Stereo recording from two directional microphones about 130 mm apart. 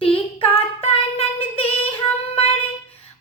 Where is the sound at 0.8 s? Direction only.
50° left (ahead or behind).